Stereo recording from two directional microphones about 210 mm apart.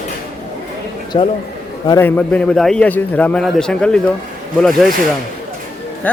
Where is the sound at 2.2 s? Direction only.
5° left (ahead or behind).